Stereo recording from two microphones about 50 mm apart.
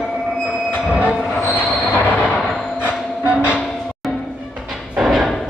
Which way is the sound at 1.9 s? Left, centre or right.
Left.